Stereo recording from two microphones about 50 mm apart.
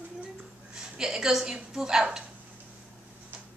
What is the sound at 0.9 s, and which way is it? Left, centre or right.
Speech, centre.